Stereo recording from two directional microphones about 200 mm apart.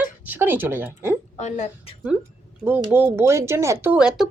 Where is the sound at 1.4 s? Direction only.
35° left (ahead or behind).